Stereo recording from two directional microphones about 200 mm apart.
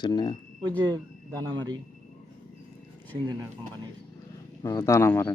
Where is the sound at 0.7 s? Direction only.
20° right (ahead or behind).